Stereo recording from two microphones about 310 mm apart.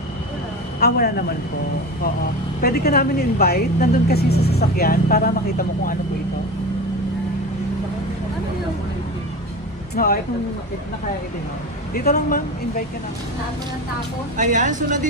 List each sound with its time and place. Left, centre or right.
0.7 s a man's voice: left
2.6 s a woman's voice: left
9.9 s speech: left
11.9 s speech: left
14.3 s speech: right